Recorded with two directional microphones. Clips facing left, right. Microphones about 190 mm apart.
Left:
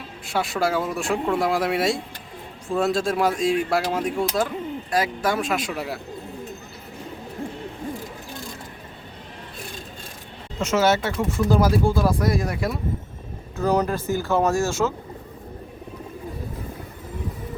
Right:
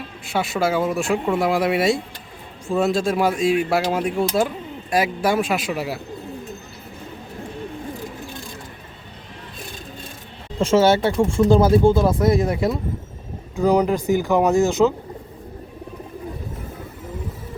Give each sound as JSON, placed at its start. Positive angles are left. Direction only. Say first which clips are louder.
{"t": 0.3, "sound": "speech", "louder": "right 2 dB", "side_deg": 0}
{"t": 10.6, "sound": "speech", "louder": "right 5 dB", "side_deg": -30}
{"t": 13.6, "sound": "speech", "louder": "right 4 dB", "side_deg": -15}